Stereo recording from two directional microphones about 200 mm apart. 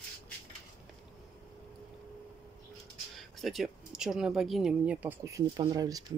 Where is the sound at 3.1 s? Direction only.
Centre (ahead or behind); by 6.0 s 20° right (ahead or behind).